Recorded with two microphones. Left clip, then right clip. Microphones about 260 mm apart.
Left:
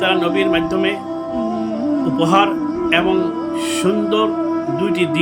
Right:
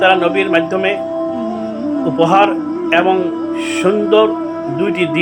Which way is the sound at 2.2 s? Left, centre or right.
Centre.